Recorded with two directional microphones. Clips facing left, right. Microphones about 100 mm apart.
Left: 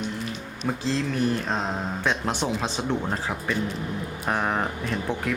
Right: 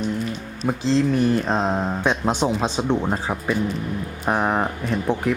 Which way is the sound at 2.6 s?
20° right (ahead or behind).